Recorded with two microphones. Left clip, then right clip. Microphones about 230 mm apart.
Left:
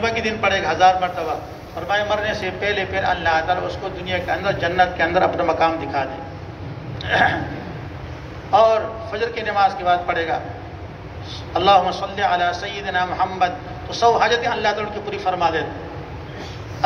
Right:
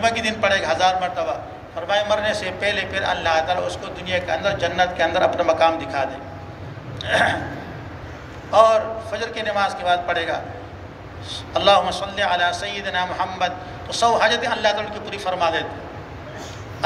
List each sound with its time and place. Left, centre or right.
0.0 s a man's voice: right
8.5 s a man's voice: right
11.5 s a man's voice: right